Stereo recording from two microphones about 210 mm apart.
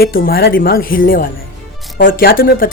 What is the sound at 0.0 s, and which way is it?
Speech, 45° left (ahead or behind).